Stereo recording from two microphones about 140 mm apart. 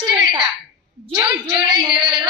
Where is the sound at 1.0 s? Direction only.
35° right (ahead or behind).